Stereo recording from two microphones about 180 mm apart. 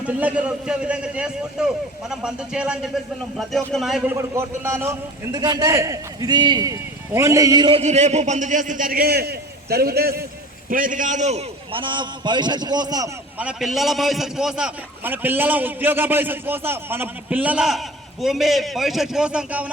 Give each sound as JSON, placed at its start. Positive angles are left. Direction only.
{"t": 0.2, "sound": "a man's voice", "side_deg": -5}
{"t": 7.8, "sound": "a man's voice", "side_deg": -40}
{"t": 10.7, "sound": "a man's voice", "side_deg": -50}
{"t": 13.4, "sound": "a man's voice", "side_deg": -5}